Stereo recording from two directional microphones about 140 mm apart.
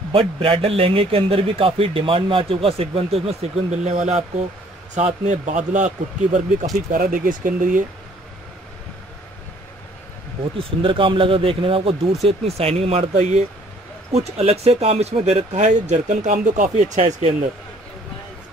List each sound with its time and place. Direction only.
0.1 s a man's voice: 40° right (ahead or behind); by 6.7 s 60° right (ahead or behind)
6.9 s speech: 75° right (ahead or behind)
10.6 s a man's voice: 35° right (ahead or behind); by 17.3 s 55° right (ahead or behind)